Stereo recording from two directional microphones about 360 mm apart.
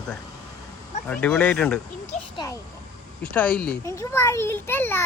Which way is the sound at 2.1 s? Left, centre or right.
Centre.